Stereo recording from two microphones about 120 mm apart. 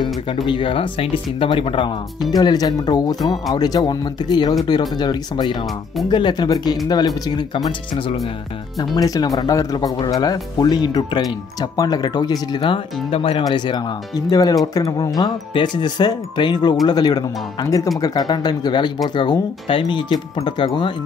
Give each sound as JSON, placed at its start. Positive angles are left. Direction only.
{"t": 0.5, "sound": "speech", "side_deg": 45}
{"t": 2.3, "sound": "speech", "side_deg": 30}
{"t": 8.7, "sound": "speech", "side_deg": 30}
{"t": 13.4, "sound": "speech", "side_deg": 35}